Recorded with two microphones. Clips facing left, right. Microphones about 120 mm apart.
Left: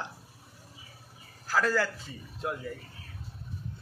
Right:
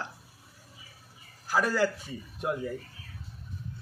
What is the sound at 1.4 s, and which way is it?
A man's voice, 15° right (ahead or behind).